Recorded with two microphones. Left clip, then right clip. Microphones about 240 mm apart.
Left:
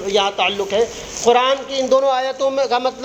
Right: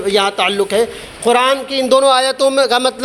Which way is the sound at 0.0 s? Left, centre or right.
Right.